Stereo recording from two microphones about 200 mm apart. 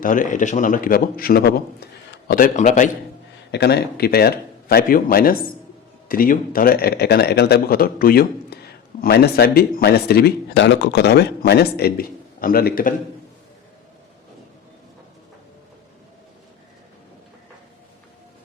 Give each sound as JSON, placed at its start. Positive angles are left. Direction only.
{"t": 0.0, "sound": "speech", "side_deg": 40}
{"t": 3.5, "sound": "speech", "side_deg": 55}